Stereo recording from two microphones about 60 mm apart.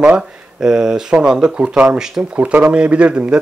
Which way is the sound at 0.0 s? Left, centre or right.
Centre.